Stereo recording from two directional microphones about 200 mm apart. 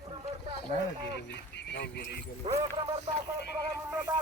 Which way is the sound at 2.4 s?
30° right (ahead or behind).